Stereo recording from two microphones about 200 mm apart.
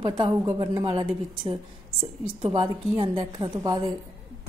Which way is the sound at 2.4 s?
25° right (ahead or behind).